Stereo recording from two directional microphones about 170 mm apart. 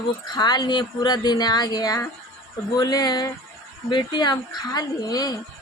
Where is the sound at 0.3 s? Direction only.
25° left (ahead or behind).